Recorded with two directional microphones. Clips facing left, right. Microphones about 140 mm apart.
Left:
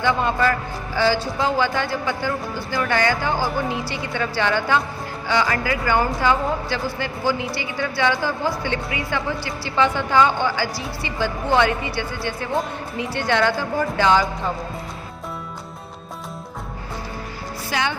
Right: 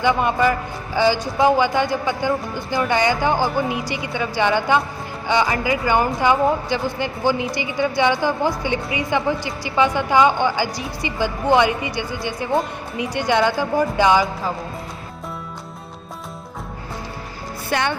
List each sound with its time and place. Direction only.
0.0 s a woman's voice: 15° right (ahead or behind)
17.7 s speech: 55° right (ahead or behind)